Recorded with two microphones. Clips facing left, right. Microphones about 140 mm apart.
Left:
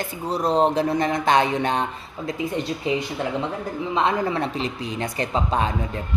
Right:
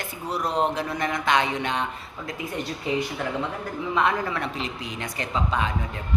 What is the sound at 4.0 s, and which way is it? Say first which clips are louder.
A woman's voice: left 3 dB; 25° left (ahead or behind).